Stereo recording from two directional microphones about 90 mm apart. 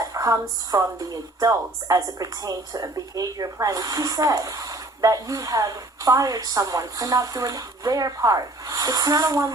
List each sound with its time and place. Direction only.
0.0 s speech: 40° right (ahead or behind)